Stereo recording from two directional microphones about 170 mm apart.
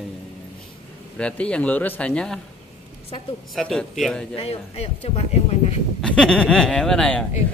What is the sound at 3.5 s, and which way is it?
Speech, centre (ahead or behind).